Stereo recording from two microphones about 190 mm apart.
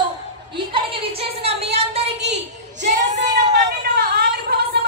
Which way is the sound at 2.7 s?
40° right (ahead or behind).